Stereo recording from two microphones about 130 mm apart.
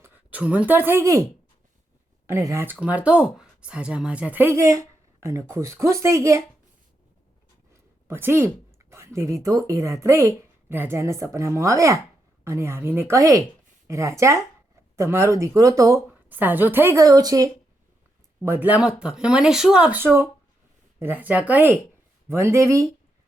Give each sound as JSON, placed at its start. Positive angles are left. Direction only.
{"t": 0.0, "sound": "speech", "side_deg": -10}
{"t": 2.2, "sound": "a woman's voice", "side_deg": -20}
{"t": 7.7, "sound": "a sound", "side_deg": -20}
{"t": 8.9, "sound": "a woman's voice", "side_deg": -20}
{"t": 16.3, "sound": "a woman's voice", "side_deg": -15}
{"t": 18.4, "sound": "a woman's voice", "side_deg": -15}